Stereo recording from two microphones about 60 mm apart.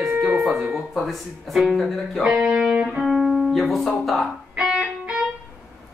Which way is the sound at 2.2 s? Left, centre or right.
Centre.